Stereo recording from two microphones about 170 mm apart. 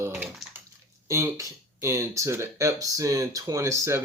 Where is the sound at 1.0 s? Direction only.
15° right (ahead or behind).